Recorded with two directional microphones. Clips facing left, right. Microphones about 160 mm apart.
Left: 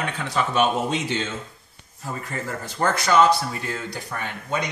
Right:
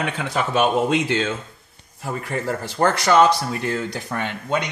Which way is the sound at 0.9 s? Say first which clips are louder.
Right 5 dB; 90° right.